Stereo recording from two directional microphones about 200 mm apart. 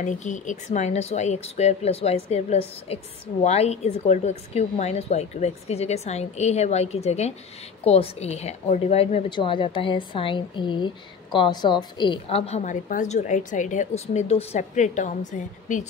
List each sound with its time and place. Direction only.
0.0 s a woman's voice: 35° left (ahead or behind)